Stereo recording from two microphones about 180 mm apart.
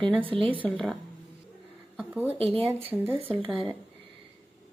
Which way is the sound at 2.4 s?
30° right (ahead or behind).